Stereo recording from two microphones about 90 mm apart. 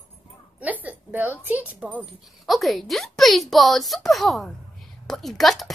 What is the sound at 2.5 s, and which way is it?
A woman's voice, centre (ahead or behind).